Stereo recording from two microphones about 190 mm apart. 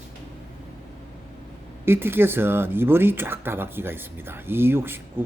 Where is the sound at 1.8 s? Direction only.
10° right (ahead or behind).